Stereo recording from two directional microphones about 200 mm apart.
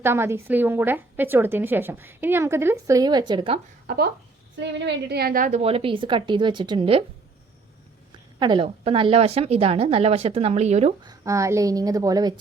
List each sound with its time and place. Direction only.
0.0 s a woman's voice: 10° right (ahead or behind)
3.8 s a woman's voice: 55° right (ahead or behind); by 7.0 s 25° right (ahead or behind)
8.4 s a woman's voice: 25° right (ahead or behind)
11.0 s a woman's voice: 15° right (ahead or behind)